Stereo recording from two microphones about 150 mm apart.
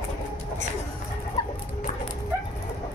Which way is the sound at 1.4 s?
25° left (ahead or behind).